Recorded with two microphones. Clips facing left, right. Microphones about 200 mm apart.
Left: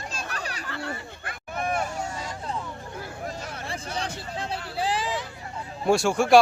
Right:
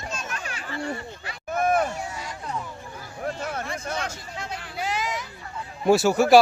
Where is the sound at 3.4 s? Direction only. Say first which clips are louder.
Right 6 dB; 50° right (ahead or behind).